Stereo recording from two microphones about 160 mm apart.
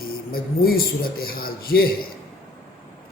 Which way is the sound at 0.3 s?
65° left (ahead or behind).